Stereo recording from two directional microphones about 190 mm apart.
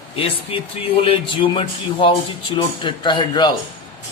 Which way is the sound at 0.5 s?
30° left (ahead or behind).